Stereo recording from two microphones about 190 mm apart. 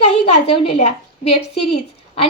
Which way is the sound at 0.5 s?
35° left (ahead or behind).